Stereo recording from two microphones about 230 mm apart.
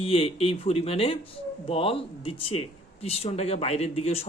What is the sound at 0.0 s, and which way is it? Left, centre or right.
Speech, left.